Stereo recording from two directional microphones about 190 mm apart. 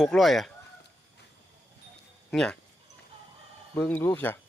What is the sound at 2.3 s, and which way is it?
Speech, centre (ahead or behind).